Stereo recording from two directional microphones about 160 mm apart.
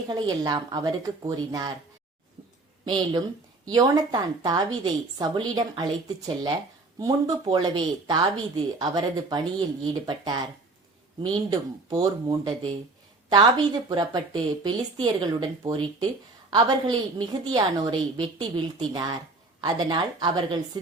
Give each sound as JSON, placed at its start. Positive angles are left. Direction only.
{"t": 0.1, "sound": "speech", "side_deg": -25}
{"t": 2.8, "sound": "speech", "side_deg": -25}